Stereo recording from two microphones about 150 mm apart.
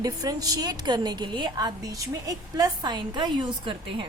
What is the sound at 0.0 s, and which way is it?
A woman's voice, 25° right (ahead or behind).